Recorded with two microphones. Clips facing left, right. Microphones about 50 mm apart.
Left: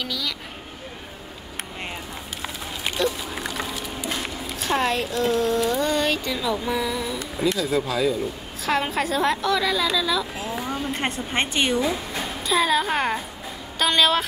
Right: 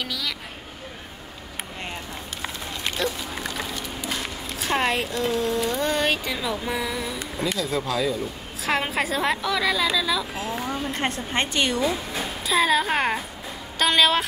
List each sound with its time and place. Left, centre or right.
0.0 s speech: centre
2.8 s dog: centre
6.7 s a sound: centre
7.3 s a woman's voice: centre
8.6 s a woman's voice: centre
10.9 s a woman's voice: centre
12.1 s a woman's voice: centre